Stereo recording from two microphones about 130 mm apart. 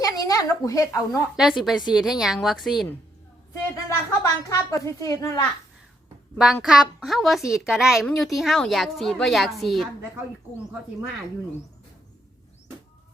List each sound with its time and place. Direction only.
0.0 s a woman's voice: 25° left (ahead or behind)
1.4 s a woman's voice: 5° right (ahead or behind)
3.5 s a woman's voice: 25° left (ahead or behind)
6.4 s a woman's voice: 5° right (ahead or behind)